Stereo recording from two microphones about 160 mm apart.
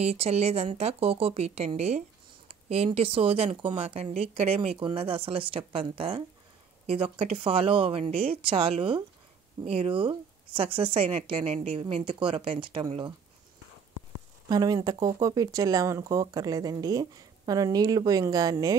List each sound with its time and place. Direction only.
0.0 s speech: 40° right (ahead or behind)
14.5 s speech: 25° right (ahead or behind)